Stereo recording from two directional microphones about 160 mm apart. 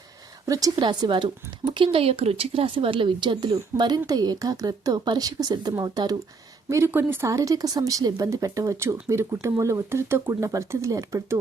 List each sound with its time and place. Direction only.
0.4 s speech: 20° right (ahead or behind)